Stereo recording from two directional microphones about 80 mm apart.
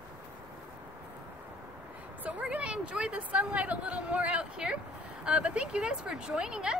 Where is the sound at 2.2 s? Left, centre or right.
Centre.